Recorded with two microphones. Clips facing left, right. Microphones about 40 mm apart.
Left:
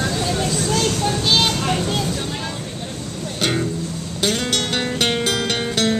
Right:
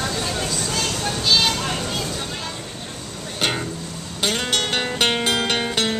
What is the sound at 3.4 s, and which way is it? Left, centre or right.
Music, centre.